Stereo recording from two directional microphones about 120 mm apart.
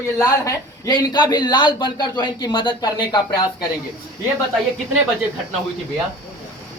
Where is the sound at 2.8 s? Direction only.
30° left (ahead or behind).